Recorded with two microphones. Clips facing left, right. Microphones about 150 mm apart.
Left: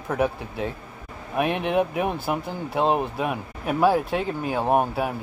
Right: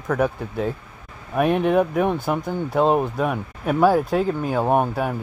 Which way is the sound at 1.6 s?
40° right (ahead or behind).